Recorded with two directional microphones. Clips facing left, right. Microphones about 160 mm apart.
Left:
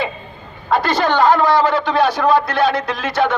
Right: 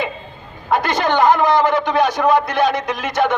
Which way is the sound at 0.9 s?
20° right (ahead or behind).